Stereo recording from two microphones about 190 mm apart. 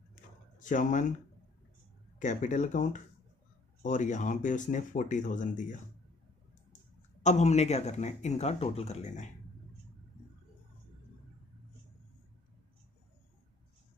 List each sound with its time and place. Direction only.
0.1 s a sound: 40° left (ahead or behind)
2.1 s speech: 40° left (ahead or behind)
7.2 s speech: 35° left (ahead or behind)